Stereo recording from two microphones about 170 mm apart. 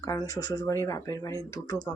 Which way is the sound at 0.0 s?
20° left (ahead or behind).